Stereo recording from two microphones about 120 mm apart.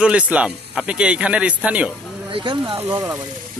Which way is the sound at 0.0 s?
10° right (ahead or behind).